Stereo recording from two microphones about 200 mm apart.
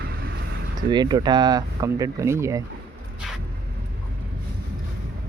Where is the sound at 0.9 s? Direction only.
20° right (ahead or behind).